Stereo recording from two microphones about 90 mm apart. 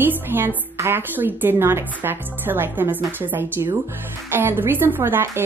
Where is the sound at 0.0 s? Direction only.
20° right (ahead or behind).